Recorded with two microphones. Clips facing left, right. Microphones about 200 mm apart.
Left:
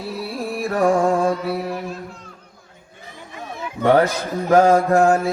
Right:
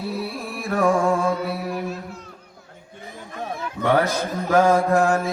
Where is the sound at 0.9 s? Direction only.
15° left (ahead or behind).